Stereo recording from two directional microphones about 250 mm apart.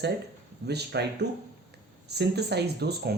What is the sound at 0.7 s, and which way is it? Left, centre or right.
Speech, right.